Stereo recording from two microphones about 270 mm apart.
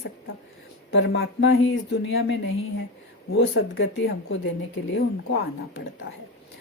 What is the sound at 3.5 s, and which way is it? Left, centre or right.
Speech, left.